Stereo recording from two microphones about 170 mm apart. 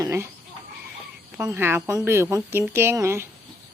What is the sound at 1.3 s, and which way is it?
Speech, 15° right (ahead or behind).